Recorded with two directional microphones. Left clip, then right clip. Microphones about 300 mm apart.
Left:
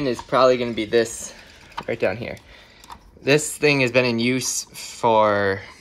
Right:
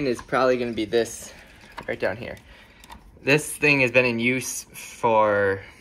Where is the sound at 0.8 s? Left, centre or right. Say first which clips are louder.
Left 4 dB; left.